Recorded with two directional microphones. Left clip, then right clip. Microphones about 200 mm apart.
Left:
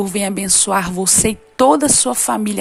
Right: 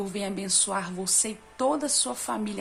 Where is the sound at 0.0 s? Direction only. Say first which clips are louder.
Left 11 dB; 45° left (ahead or behind).